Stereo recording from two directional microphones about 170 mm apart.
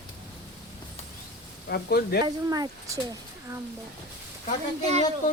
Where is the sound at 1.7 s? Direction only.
65° left (ahead or behind).